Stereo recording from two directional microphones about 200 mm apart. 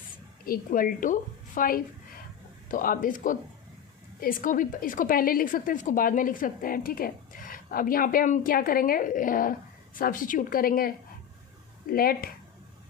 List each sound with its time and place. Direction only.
0.4 s a woman's voice: 45° left (ahead or behind)